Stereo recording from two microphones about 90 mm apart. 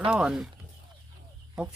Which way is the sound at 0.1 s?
5° right (ahead or behind).